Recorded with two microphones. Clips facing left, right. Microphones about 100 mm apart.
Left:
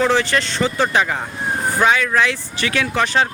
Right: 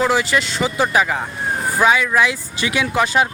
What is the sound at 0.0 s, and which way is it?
Speech, 5° right (ahead or behind).